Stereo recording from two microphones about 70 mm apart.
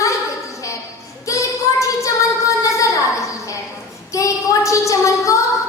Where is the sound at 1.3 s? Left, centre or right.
Left.